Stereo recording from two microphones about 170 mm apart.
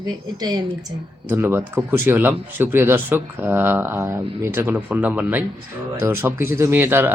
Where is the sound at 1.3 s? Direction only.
15° right (ahead or behind).